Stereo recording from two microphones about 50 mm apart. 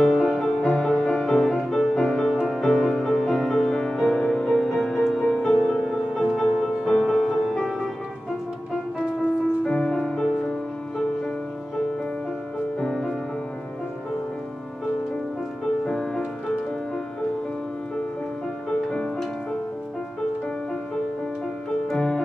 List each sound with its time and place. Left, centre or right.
0.0 s music: centre
0.5 s music: centre
9.7 s music: centre
12.8 s music: centre
15.8 s music: centre
18.9 s music: centre
21.8 s music: centre